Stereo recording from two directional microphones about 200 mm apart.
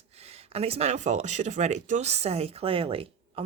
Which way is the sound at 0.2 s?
30° right (ahead or behind).